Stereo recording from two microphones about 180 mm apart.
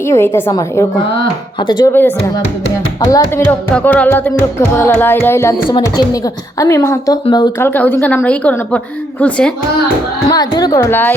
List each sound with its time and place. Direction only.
0.1 s a woman's voice: 15° left (ahead or behind)
1.9 s a woman's voice: 10° left (ahead or behind)
3.4 s a woman's voice: 5° left (ahead or behind)
5.6 s a woman's voice: 25° left (ahead or behind)
7.7 s a woman's voice: 10° left (ahead or behind)
10.2 s a woman's voice: 20° left (ahead or behind)